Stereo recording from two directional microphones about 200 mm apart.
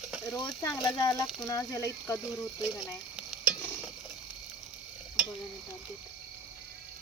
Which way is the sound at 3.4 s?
5° left (ahead or behind).